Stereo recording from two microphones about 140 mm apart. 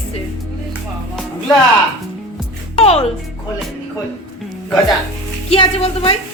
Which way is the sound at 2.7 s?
45° left (ahead or behind).